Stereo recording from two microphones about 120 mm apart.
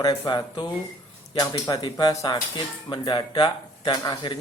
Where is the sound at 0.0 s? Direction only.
35° left (ahead or behind).